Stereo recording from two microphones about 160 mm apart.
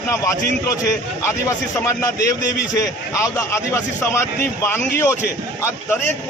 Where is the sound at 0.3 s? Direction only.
20° left (ahead or behind).